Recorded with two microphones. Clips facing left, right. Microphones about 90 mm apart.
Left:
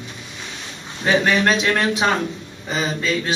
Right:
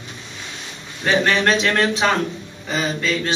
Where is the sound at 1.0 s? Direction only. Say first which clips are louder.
Even; 10° left (ahead or behind).